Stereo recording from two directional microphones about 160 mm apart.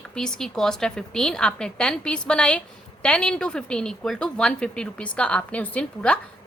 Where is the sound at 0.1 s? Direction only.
5° left (ahead or behind).